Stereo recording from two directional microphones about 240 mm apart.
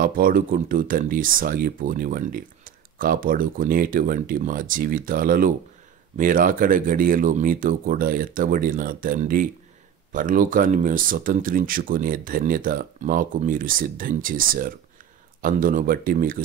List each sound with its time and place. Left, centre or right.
0.0 s speech: right